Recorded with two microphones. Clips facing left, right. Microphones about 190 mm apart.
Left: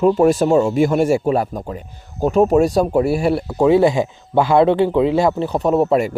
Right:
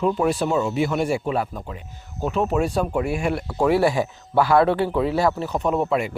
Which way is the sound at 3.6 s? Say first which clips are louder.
Left 5 dB; 20° left (ahead or behind).